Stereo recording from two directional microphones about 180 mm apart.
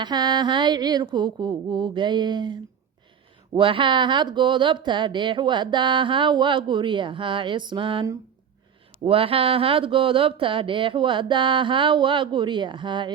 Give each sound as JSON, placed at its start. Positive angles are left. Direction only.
{"t": 0.0, "sound": "speech", "side_deg": -25}